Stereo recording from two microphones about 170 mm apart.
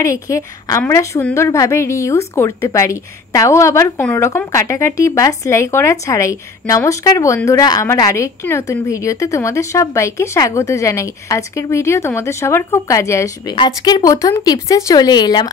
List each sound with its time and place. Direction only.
0.0 s speech: 15° left (ahead or behind)